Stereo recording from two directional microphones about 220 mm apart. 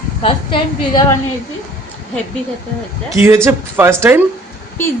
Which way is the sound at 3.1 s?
15° right (ahead or behind).